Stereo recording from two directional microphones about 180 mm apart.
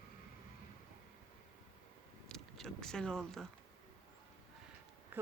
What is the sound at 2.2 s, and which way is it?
Speech, 5° left (ahead or behind).